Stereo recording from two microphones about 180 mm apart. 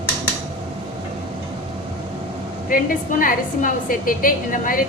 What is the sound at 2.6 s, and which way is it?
A woman's voice, 50° left (ahead or behind).